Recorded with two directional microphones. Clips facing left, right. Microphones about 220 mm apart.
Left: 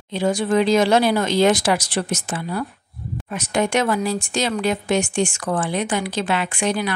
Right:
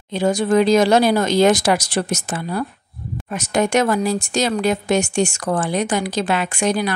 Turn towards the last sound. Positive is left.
turn(degrees=-40)  # may be behind; listen again after turning